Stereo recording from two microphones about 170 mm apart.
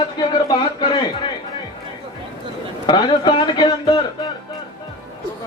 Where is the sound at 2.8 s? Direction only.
30° left (ahead or behind).